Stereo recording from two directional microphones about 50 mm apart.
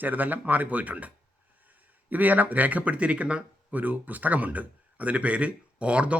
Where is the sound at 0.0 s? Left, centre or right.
Right.